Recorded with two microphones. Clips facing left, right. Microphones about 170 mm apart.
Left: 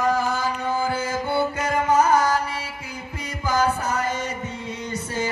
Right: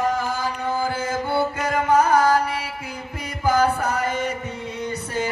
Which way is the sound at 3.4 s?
55° right (ahead or behind).